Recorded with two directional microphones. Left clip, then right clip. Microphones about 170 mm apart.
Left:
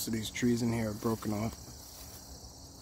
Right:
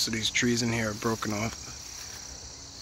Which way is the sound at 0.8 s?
10° right (ahead or behind).